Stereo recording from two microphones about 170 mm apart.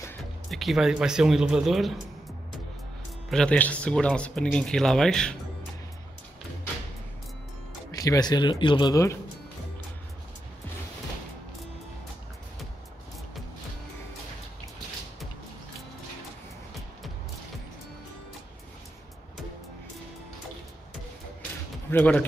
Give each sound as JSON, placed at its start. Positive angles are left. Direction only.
{"t": 0.2, "sound": "speech", "side_deg": 0}
{"t": 3.3, "sound": "speech", "side_deg": 5}
{"t": 7.9, "sound": "speech", "side_deg": 20}
{"t": 21.9, "sound": "speech", "side_deg": 10}